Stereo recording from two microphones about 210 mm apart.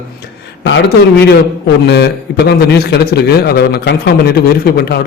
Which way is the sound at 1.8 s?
50° left (ahead or behind).